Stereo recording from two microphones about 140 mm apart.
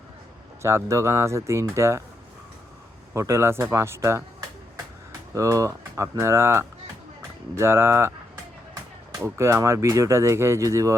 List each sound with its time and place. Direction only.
0.6 s speech: 20° right (ahead or behind)
3.1 s speech: 20° right (ahead or behind)
5.3 s speech: 20° right (ahead or behind)
9.1 s speech: 20° right (ahead or behind)